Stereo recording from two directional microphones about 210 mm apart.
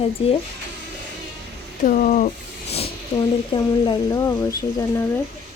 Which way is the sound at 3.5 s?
20° left (ahead or behind).